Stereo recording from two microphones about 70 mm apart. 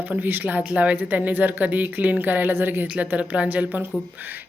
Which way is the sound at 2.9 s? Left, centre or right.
Centre.